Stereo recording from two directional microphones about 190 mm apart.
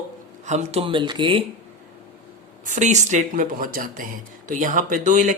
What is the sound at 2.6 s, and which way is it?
Speech, 40° right (ahead or behind).